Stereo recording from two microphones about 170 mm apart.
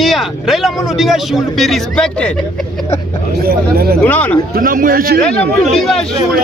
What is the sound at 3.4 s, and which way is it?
Speech, 65° right (ahead or behind).